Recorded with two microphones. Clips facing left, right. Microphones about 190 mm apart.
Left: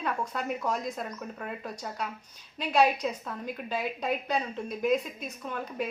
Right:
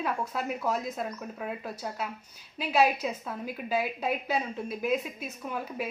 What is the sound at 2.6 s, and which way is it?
A woman's voice, 5° right (ahead or behind).